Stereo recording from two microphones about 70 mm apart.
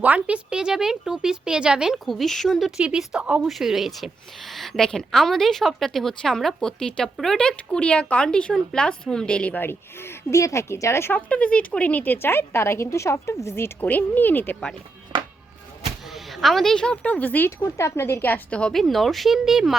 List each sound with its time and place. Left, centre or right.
0.0 s speech: right
2.0 s a woman's voice: centre
3.4 s a woman's voice: centre
9.6 s a woman's voice: left
11.3 s a woman's voice: centre; by 13.7 s left
13.8 s speech: left
14.5 s speech: centre
16.1 s speech: centre; by 17.5 s left
17.7 s a woman's voice: left
18.7 s a woman's voice: centre